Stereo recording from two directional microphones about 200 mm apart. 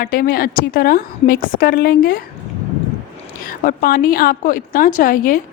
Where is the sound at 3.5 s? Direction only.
45° left (ahead or behind).